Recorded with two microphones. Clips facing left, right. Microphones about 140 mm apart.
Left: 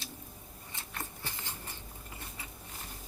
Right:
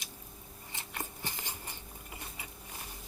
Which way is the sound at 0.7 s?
20° right (ahead or behind).